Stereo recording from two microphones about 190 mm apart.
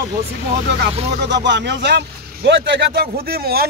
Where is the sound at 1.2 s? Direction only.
65° right (ahead or behind).